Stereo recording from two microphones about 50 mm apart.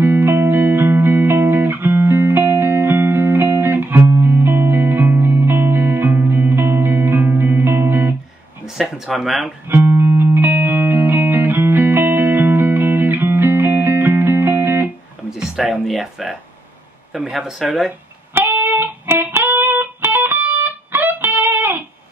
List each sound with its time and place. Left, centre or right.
0.0 s music: right
8.6 s speech: centre
9.7 s music: right
15.3 s a sound: centre
15.9 s speech: centre
18.3 s music: right